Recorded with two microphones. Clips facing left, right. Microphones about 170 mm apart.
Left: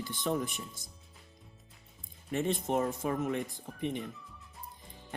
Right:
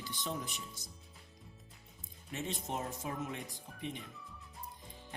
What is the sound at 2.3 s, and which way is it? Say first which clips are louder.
Speech: left 9 dB; 55° left (ahead or behind).